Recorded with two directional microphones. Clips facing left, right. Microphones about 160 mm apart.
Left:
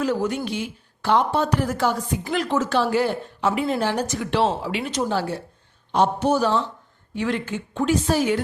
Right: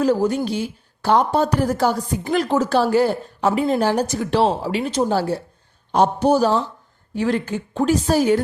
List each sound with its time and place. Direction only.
0.0 s a woman's voice: 35° right (ahead or behind)